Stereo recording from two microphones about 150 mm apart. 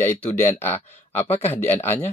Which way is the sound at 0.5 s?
15° left (ahead or behind).